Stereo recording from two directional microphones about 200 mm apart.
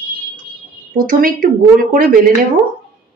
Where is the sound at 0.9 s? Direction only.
45° right (ahead or behind).